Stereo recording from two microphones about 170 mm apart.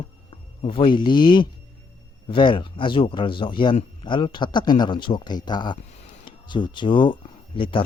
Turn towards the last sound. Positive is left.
turn(degrees=30)  # may be behind; listen again after turning